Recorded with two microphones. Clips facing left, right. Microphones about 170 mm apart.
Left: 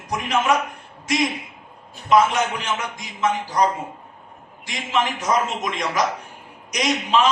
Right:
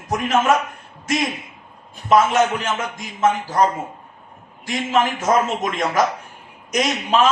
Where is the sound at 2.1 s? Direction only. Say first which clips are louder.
Right 2 dB; 50° right (ahead or behind).